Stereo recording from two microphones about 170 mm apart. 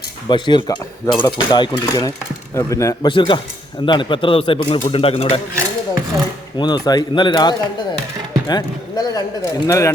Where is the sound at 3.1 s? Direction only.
30° left (ahead or behind).